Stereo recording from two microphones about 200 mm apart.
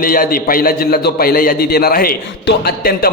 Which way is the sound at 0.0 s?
45° left (ahead or behind).